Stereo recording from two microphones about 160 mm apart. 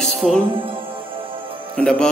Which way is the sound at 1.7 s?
5° left (ahead or behind).